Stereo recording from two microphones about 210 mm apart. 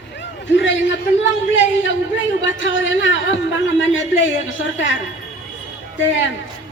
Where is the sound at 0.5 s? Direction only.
60° left (ahead or behind).